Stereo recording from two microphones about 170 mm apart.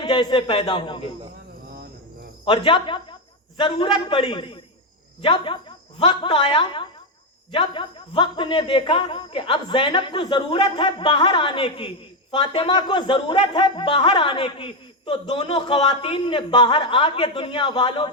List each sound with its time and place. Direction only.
0.0 s a man's voice: 25° left (ahead or behind)
2.4 s speech: 30° left (ahead or behind)